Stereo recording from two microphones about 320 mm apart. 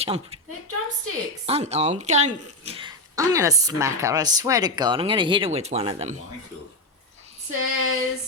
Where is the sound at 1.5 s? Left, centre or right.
Centre.